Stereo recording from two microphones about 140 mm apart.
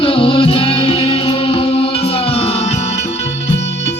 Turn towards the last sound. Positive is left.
turn(degrees=45)  # may be behind; listen again after turning